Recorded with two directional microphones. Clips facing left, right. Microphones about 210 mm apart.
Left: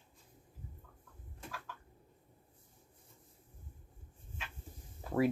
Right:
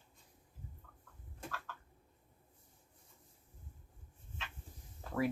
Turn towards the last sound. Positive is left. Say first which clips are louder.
# left 6 dB
turn(degrees=10)  # may be behind; listen again after turning